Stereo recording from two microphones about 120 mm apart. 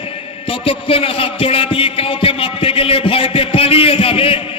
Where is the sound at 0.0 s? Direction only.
50° left (ahead or behind).